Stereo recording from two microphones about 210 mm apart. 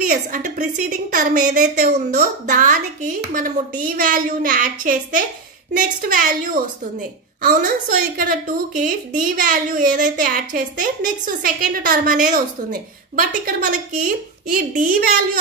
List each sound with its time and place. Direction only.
0.0 s a woman's voice: 40° right (ahead or behind)
8.2 s a woman's voice: 40° right (ahead or behind)